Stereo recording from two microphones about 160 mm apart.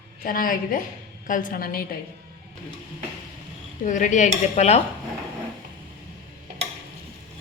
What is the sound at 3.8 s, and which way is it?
Cutlery, 50° left (ahead or behind).